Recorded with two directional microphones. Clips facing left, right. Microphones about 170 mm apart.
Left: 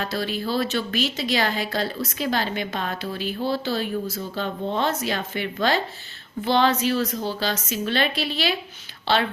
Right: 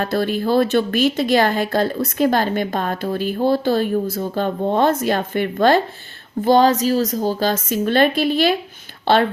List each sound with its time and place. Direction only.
0.0 s a woman's voice: 50° right (ahead or behind)